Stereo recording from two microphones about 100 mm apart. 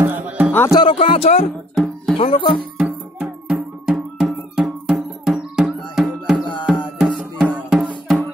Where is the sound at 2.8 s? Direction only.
5° right (ahead or behind).